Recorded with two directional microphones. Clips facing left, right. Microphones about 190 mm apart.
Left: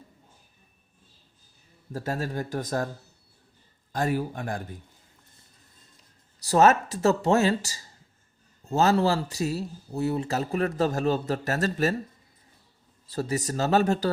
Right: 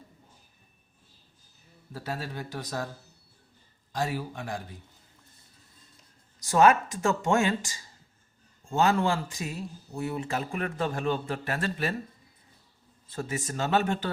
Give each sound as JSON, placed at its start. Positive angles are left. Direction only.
{"t": 1.9, "sound": "a man's voice", "side_deg": 45}
{"t": 3.9, "sound": "a man's voice", "side_deg": 50}
{"t": 6.4, "sound": "speech", "side_deg": 40}
{"t": 13.1, "sound": "speech", "side_deg": 40}